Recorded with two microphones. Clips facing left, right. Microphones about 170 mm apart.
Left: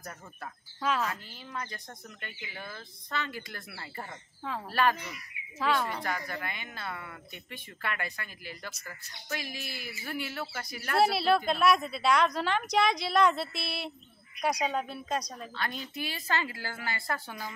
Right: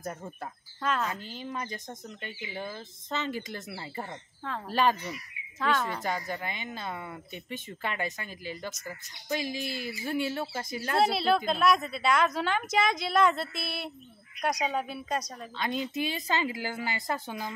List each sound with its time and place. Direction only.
0.0 s speech: 25° right (ahead or behind)
0.7 s a woman's voice: 5° left (ahead or behind)
1.1 s speech: 20° right (ahead or behind)
4.4 s speech: 5° left (ahead or behind)
4.6 s speech: 20° right (ahead or behind)
5.6 s a woman's voice: centre (ahead or behind)
6.0 s speech: 20° right (ahead or behind)
11.0 s a woman's voice: centre (ahead or behind)
15.5 s speech: 20° right (ahead or behind)